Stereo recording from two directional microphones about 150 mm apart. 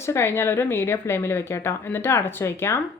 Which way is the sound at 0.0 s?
15° left (ahead or behind).